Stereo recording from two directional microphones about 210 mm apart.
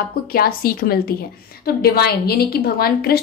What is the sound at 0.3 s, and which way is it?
A woman's voice, 45° left (ahead or behind).